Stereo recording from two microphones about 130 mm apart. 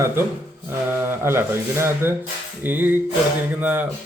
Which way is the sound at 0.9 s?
15° right (ahead or behind).